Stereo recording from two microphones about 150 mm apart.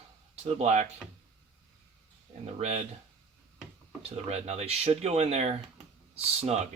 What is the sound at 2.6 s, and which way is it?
Speech, 45° right (ahead or behind).